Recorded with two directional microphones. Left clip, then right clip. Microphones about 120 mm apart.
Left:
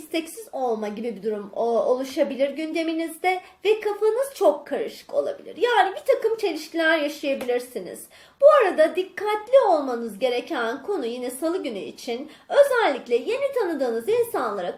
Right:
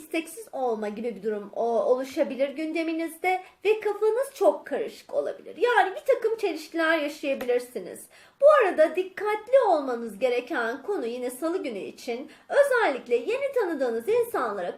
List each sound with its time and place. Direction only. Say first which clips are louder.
0.1 s speech: left 2 dB; 25° right (ahead or behind)